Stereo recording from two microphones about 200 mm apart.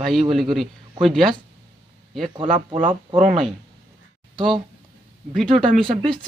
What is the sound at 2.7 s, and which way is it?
Speech, 40° right (ahead or behind).